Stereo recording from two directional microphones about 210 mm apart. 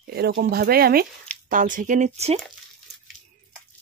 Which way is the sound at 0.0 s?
45° right (ahead or behind).